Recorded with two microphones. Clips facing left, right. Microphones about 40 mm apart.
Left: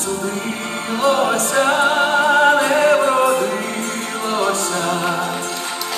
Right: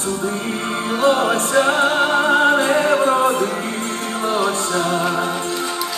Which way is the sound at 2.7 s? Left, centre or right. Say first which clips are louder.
Left 2 dB; left.